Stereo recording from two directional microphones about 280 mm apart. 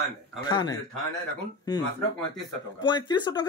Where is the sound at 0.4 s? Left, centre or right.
Centre.